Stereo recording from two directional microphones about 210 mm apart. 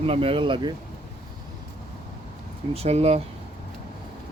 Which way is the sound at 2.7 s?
30° right (ahead or behind).